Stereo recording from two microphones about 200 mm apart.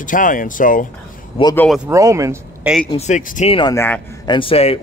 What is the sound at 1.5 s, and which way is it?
Speech, 10° left (ahead or behind).